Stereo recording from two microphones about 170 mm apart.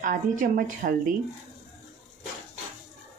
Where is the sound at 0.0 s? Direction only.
50° right (ahead or behind).